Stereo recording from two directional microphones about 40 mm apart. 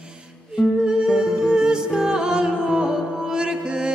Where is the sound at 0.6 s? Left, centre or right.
Centre.